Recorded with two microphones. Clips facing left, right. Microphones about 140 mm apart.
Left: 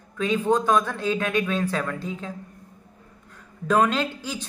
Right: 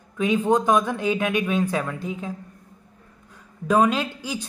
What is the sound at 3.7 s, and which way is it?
Speech, 10° right (ahead or behind).